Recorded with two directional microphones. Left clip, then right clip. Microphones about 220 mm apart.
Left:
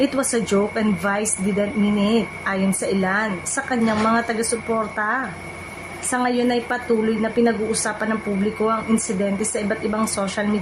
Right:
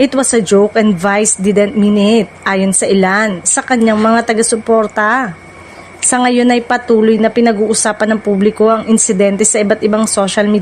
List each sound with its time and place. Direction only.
0.0 s a woman's voice: 35° right (ahead or behind)